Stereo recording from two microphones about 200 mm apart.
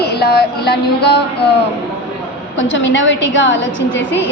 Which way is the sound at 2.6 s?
65° left (ahead or behind).